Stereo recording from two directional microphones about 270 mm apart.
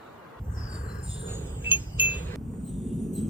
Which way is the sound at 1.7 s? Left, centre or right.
Centre.